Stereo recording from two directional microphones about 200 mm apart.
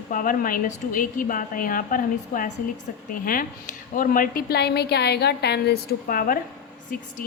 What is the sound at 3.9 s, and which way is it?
A woman's voice, 45° left (ahead or behind).